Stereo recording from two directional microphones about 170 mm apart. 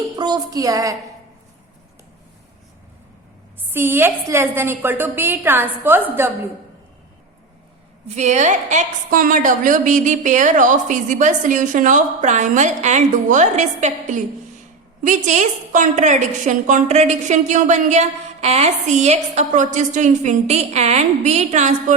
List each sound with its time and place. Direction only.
0.2 s a woman's voice: 25° right (ahead or behind)
3.7 s a woman's voice: 15° right (ahead or behind)
8.0 s a woman's voice: 40° right (ahead or behind)